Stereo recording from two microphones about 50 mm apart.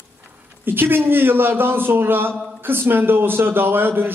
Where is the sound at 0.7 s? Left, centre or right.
Right.